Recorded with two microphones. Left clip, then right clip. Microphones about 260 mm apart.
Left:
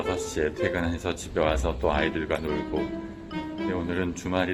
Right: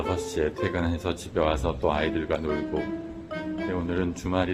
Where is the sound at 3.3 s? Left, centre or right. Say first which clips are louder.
Even; centre.